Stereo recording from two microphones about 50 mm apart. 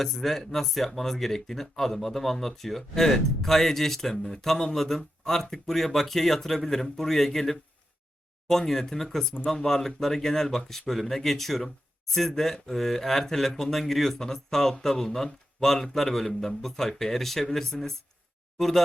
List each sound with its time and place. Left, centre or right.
0.0 s speech: centre